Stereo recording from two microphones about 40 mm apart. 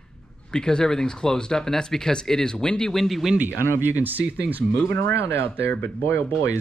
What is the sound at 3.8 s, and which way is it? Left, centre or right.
Speech, right.